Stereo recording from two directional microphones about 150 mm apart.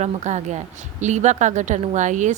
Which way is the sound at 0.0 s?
50° right (ahead or behind).